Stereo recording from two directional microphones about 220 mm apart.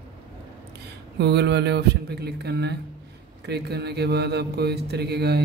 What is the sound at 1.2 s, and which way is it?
Speech, 50° right (ahead or behind).